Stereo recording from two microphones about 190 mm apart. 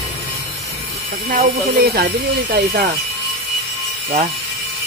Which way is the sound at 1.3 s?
50° right (ahead or behind).